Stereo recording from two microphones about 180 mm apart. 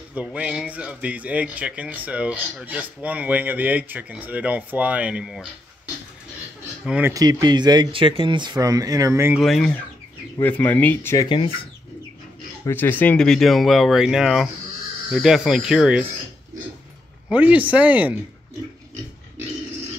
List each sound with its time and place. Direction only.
0.1 s speech: 5° right (ahead or behind)
6.8 s speech: 10° right (ahead or behind)
7.2 s speech: 25° right (ahead or behind)
9.4 s speech: centre (ahead or behind)
12.6 s speech: 10° left (ahead or behind)
17.3 s speech: 10° right (ahead or behind)